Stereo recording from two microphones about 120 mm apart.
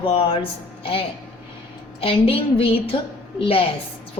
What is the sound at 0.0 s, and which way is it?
Speech, 50° left (ahead or behind).